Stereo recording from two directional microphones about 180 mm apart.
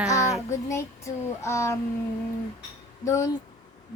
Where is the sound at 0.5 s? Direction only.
15° left (ahead or behind).